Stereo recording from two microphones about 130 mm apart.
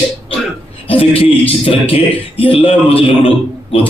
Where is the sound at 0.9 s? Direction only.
45° left (ahead or behind).